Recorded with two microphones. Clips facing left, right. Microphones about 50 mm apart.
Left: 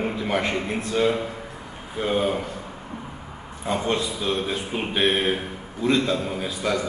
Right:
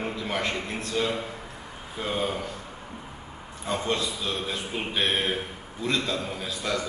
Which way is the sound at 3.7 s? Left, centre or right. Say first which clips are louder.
Left 3 dB; centre.